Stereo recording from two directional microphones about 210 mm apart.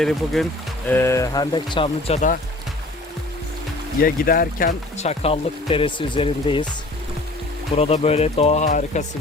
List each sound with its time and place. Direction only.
0.0 s speech: centre (ahead or behind); by 2.4 s 35° left (ahead or behind)
4.0 s speech: 45° left (ahead or behind); by 6.7 s 25° left (ahead or behind)
7.8 s speech: 30° left (ahead or behind)